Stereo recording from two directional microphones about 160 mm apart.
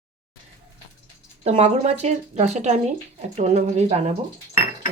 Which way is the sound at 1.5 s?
40° right (ahead or behind).